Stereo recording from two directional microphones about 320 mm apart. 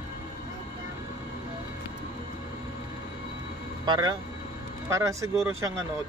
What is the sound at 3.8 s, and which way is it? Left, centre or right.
Speech, centre.